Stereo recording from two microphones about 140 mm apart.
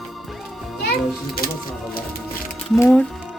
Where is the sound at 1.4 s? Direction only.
90° left.